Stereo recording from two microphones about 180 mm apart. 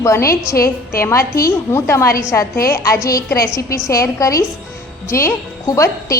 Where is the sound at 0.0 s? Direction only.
15° left (ahead or behind).